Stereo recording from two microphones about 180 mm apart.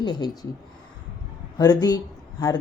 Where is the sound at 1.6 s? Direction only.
20° left (ahead or behind).